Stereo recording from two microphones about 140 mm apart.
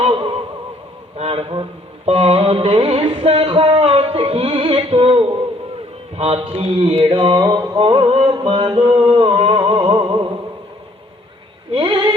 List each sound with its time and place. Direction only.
0.0 s music: 40° right (ahead or behind)
7.3 s a sound: 25° right (ahead or behind)
7.8 s music: 40° right (ahead or behind)
8.7 s music: 30° right (ahead or behind)
10.0 s music: 30° right (ahead or behind)
11.7 s a sound: 35° right (ahead or behind)